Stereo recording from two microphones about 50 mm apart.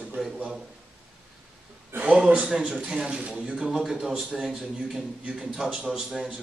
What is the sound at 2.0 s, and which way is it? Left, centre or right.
A man's voice, right.